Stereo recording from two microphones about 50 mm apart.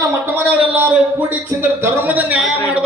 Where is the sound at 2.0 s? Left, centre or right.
Right.